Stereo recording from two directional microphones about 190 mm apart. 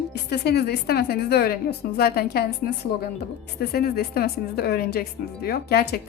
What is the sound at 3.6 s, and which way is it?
A woman's voice, 55° left (ahead or behind).